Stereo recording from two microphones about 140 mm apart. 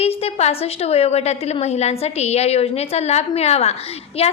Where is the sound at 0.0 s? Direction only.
45° left (ahead or behind).